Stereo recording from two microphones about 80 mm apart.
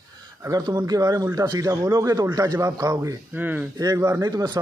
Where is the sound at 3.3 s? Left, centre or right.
Right.